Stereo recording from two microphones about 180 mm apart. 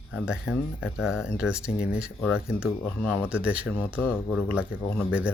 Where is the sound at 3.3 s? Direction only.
5° right (ahead or behind).